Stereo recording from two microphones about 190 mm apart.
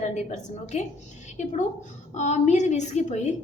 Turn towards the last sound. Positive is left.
turn(degrees=35)  # may be behind; listen again after turning